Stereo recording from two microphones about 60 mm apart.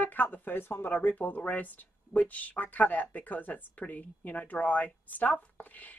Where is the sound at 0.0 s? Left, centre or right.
Left.